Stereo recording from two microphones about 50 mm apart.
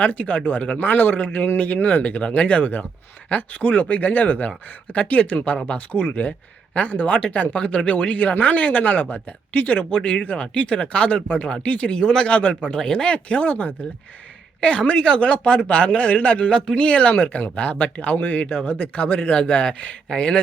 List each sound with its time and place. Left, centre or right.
0.0 s speech: left
9.9 s speech: left
12.0 s a man's voice: centre
12.3 s speech: left
12.7 s speech: centre; by 19.3 s left
19.3 s speech: centre